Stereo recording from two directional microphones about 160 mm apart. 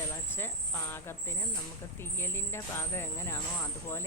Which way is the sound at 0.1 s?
15° left (ahead or behind).